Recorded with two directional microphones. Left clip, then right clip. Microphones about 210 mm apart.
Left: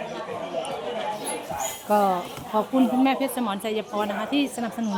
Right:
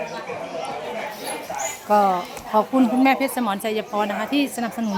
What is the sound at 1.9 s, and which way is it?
A woman's voice, centre (ahead or behind).